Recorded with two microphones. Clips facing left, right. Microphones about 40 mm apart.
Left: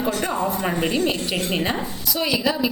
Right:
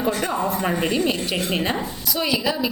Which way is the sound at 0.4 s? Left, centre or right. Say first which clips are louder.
Even; centre.